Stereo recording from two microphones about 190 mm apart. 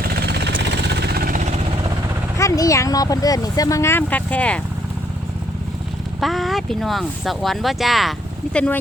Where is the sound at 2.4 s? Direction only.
15° left (ahead or behind).